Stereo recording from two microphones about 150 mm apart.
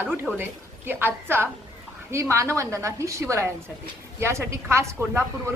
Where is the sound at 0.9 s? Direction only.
15° right (ahead or behind).